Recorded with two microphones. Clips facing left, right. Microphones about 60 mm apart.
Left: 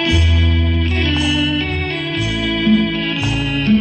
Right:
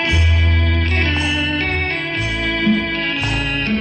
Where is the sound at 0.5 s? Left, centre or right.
Right.